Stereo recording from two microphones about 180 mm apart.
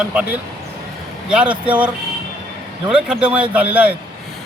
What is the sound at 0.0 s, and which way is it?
Speech, 5° right (ahead or behind).